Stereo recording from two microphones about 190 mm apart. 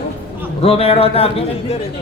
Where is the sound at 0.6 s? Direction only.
30° left (ahead or behind).